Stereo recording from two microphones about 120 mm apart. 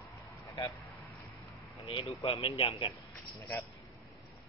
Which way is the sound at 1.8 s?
55° left (ahead or behind).